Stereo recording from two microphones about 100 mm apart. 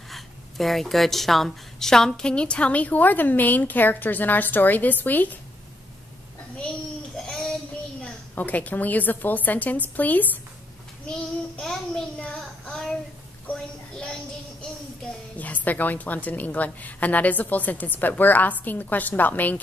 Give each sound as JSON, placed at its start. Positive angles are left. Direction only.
{"t": 0.1, "sound": "a woman's voice", "side_deg": 0}
{"t": 7.2, "sound": "child singing", "side_deg": 5}
{"t": 8.0, "sound": "a woman's voice", "side_deg": 15}
{"t": 11.1, "sound": "child singing", "side_deg": 5}
{"t": 13.5, "sound": "a sound", "side_deg": 10}
{"t": 15.3, "sound": "a woman's voice", "side_deg": 15}